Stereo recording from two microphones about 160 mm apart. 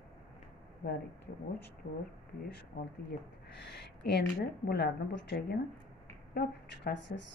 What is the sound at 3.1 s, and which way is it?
A woman's voice, 90° left.